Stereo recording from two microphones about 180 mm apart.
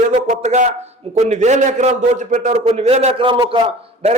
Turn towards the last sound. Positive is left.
turn(degrees=-35)  # may be behind; listen again after turning